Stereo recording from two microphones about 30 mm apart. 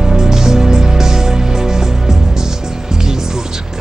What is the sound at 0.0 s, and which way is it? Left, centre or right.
Music, centre.